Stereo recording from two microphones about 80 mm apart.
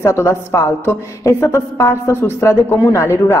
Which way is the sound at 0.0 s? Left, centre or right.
Left.